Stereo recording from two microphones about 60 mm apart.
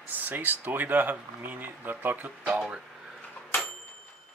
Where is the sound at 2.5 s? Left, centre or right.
Centre.